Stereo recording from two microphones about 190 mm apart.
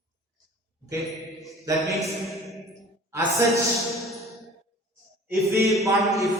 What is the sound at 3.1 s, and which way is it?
Speech, 15° right (ahead or behind).